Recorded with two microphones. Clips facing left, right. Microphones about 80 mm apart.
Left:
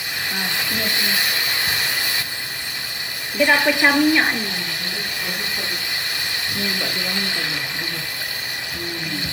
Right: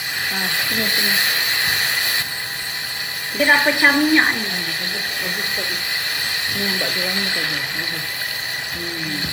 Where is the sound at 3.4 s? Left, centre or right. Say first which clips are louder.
Right 1 dB; right.